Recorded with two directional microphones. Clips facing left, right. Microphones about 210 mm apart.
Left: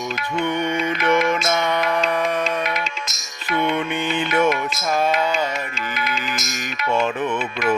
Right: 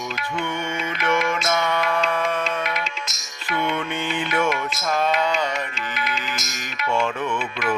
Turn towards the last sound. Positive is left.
turn(degrees=45)  # may be behind; listen again after turning